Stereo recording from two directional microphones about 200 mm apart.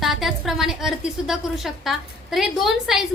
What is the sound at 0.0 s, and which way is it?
A woman's voice, centre (ahead or behind).